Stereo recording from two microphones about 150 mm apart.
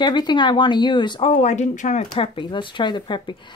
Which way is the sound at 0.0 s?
30° left (ahead or behind).